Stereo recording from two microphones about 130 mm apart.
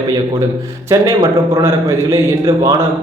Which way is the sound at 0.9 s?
30° right (ahead or behind).